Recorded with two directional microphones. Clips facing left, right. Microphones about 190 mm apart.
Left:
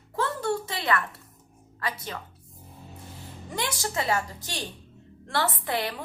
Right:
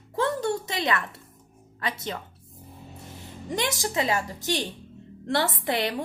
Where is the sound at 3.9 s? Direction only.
20° right (ahead or behind).